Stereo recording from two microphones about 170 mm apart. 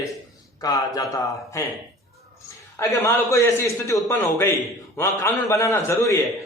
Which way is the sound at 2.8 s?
15° left (ahead or behind).